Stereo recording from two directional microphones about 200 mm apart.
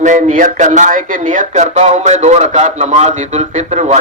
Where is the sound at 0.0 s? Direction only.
40° right (ahead or behind).